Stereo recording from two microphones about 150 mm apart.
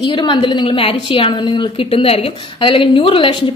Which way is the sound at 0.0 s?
30° left (ahead or behind).